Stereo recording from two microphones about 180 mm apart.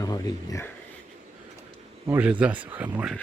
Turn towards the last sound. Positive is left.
turn(degrees=-10)  # may be behind; listen again after turning